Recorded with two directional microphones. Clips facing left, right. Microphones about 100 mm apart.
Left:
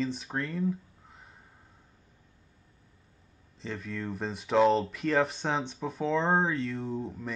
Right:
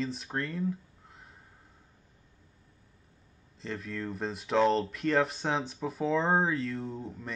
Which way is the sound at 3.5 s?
Centre (ahead or behind).